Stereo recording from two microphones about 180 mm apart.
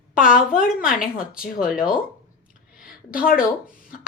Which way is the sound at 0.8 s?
50° left (ahead or behind).